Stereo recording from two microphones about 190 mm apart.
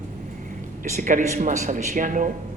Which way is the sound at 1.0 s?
40° right (ahead or behind).